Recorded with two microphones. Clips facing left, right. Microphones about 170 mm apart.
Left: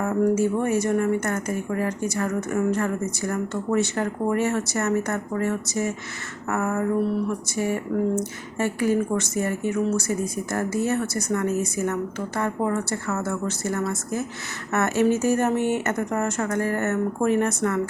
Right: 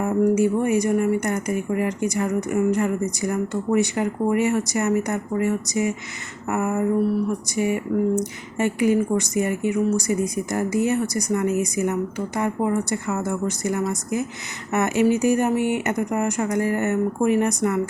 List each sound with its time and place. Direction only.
0.0 s speech: 15° right (ahead or behind)